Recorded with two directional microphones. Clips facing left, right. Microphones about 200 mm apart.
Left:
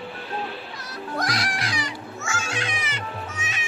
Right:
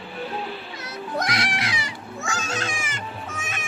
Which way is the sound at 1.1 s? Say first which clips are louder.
Right 1 dB; 20° right (ahead or behind).